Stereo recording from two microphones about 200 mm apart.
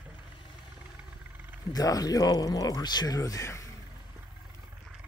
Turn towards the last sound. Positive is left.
turn(degrees=15)  # may be behind; listen again after turning